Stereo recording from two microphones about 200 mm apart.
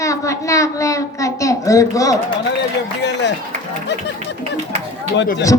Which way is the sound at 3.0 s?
60° left (ahead or behind).